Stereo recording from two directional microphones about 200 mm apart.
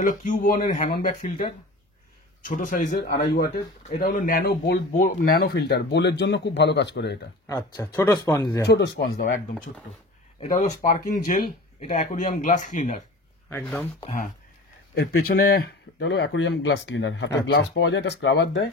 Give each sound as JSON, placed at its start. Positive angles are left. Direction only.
{"t": 0.0, "sound": "speech", "side_deg": 40}
{"t": 3.3, "sound": "speech", "side_deg": 55}
{"t": 7.4, "sound": "speech", "side_deg": 20}
{"t": 8.6, "sound": "speech", "side_deg": 55}
{"t": 10.4, "sound": "speech", "side_deg": 40}
{"t": 13.5, "sound": "speech", "side_deg": 5}
{"t": 15.0, "sound": "speech", "side_deg": 50}